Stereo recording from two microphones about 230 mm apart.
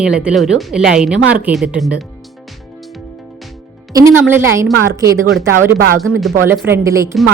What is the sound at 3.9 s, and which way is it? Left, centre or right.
Speech, centre.